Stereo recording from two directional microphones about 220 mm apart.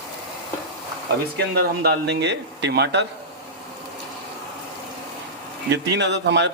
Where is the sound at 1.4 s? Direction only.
45° right (ahead or behind).